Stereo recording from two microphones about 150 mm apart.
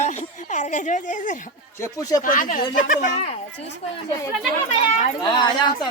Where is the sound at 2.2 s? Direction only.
60° left (ahead or behind).